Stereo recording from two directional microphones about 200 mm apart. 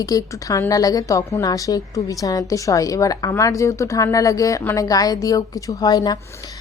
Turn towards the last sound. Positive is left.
turn(degrees=20)  # may be behind; listen again after turning